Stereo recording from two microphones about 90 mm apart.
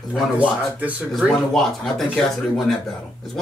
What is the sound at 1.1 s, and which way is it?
Speech, centre (ahead or behind).